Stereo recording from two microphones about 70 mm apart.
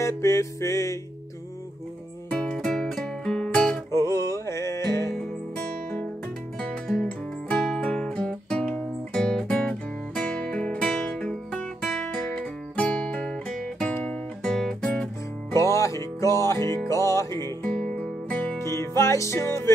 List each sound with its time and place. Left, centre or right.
0.0 s music: left
2.3 s music: centre
3.9 s music: left
6.6 s music: centre
15.5 s music: left
17.7 s music: centre
18.6 s music: left